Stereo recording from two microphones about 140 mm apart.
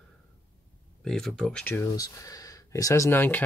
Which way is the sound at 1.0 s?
5° left (ahead or behind).